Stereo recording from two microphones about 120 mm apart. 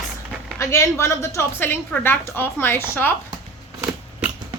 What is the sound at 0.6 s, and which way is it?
A woman's voice, 25° left (ahead or behind).